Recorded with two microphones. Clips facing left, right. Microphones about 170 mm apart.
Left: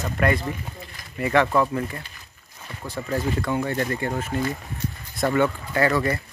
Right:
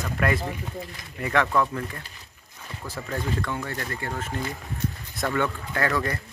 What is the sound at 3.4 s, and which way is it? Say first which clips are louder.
Speech: left 6 dB; 20° left (ahead or behind).